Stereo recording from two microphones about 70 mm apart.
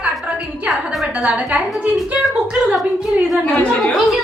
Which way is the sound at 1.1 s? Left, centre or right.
Centre.